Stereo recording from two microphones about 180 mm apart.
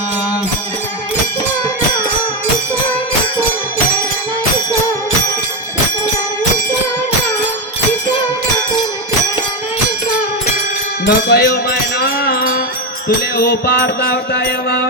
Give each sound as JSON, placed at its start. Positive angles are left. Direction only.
{"t": 11.0, "sound": "music", "side_deg": 60}
{"t": 13.3, "sound": "mantra", "side_deg": 60}